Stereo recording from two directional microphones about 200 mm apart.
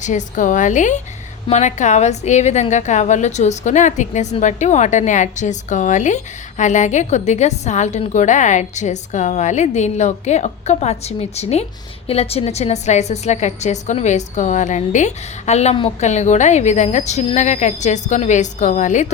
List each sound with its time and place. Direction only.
0.0 s a woman's voice: 35° left (ahead or behind)